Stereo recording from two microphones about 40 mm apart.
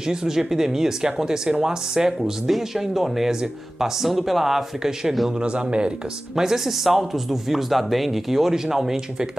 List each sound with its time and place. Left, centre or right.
0.1 s a man's voice: centre
5.4 s speech: right
6.3 s a man's voice: centre